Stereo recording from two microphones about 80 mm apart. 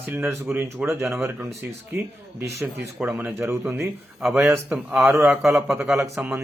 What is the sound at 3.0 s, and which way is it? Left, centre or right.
Speech, centre.